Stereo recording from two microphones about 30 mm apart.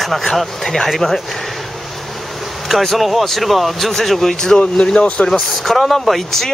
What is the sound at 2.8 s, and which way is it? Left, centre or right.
Speech, centre.